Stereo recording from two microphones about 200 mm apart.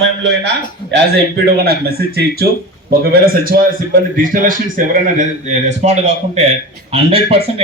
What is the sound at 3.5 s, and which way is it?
A man's voice, 50° right (ahead or behind).